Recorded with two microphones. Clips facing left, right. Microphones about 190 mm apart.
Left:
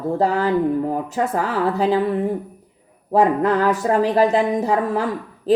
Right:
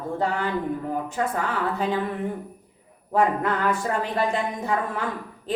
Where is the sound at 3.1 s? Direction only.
35° left (ahead or behind).